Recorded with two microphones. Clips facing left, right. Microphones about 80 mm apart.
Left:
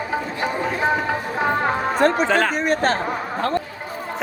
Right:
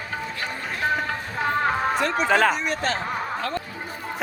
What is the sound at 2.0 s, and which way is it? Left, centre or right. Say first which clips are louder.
Music: left 6 dB; left.